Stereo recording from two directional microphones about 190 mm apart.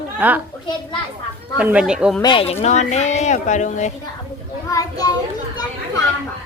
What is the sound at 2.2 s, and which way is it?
Speech, 25° left (ahead or behind).